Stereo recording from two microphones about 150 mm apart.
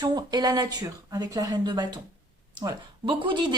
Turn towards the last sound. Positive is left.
turn(degrees=-30)  # may be behind; listen again after turning